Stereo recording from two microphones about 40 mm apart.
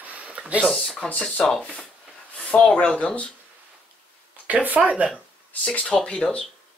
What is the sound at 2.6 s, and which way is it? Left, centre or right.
Speech, left.